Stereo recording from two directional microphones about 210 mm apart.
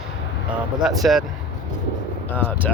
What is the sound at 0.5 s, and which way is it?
Speech, centre (ahead or behind).